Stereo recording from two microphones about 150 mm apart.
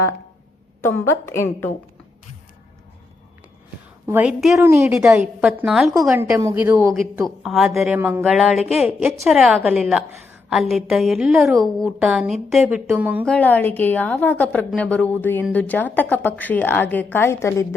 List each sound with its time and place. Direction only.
0.9 s a woman's voice: 15° left (ahead or behind)
4.0 s a woman's voice: 10° right (ahead or behind)
4.5 s speech: 20° right (ahead or behind)
4.9 s a woman's voice: 5° right (ahead or behind)
6.4 s a woman's voice: 15° right (ahead or behind)
7.4 s a woman's voice: centre (ahead or behind)
7.9 s a woman's voice: 10° right (ahead or behind)
13.2 s a woman's voice: 10° left (ahead or behind)